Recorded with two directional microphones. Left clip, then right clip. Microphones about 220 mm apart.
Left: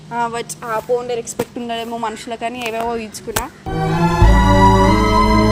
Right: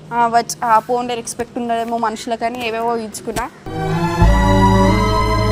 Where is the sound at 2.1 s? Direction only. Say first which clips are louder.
Right 5 dB; 25° right (ahead or behind).